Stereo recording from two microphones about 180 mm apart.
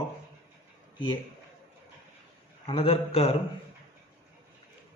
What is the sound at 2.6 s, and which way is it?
Speech, 30° left (ahead or behind).